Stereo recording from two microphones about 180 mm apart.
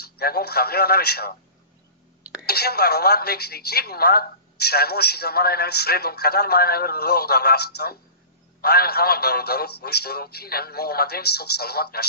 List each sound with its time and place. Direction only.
0.0 s a woman's voice: 60° left (ahead or behind)
2.4 s a woman's voice: 60° left (ahead or behind)